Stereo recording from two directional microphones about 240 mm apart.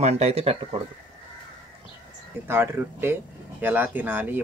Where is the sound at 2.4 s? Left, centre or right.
Centre.